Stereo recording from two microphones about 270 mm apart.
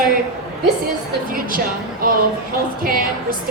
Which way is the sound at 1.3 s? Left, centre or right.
Right.